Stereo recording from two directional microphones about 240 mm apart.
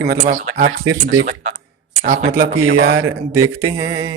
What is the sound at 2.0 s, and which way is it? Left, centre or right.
Speech, right.